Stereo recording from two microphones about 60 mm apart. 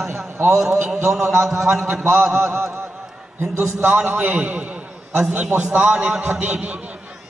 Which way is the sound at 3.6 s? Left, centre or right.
Right.